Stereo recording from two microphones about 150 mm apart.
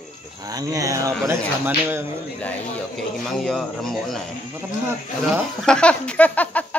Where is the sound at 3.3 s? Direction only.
Centre (ahead or behind).